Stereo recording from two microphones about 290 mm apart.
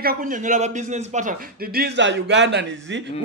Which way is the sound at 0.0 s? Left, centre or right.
Right.